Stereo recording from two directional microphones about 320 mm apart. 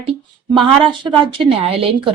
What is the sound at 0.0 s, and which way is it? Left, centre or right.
A woman's voice, centre.